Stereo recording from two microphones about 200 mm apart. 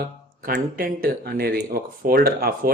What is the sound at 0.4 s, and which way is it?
Speech, 45° right (ahead or behind).